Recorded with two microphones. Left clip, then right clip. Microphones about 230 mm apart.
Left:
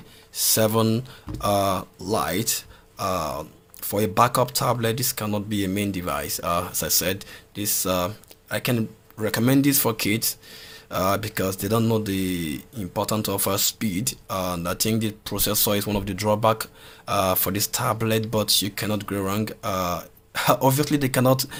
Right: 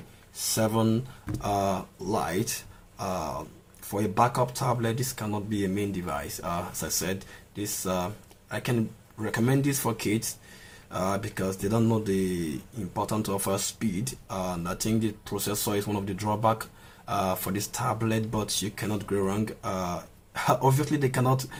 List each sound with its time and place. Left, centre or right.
0.5 s speech: left